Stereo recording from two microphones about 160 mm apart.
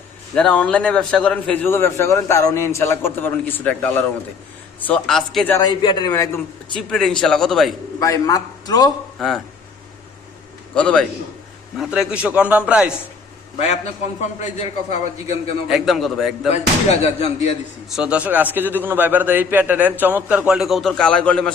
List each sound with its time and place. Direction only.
0.3 s a man's voice: 5° left (ahead or behind)
5.5 s a man's voice: 25° left (ahead or behind)
6.9 s a man's voice: centre (ahead or behind)
7.9 s a man's voice: 20° left (ahead or behind)
9.1 s speech: centre (ahead or behind)
10.8 s a man's voice: 5° left (ahead or behind)
11.8 s a man's voice: 5° right (ahead or behind)
14.2 s a man's voice: 45° left (ahead or behind)
15.6 s a man's voice: centre (ahead or behind)
16.5 s speech: 40° left (ahead or behind)
17.8 s a man's voice: 5° right (ahead or behind)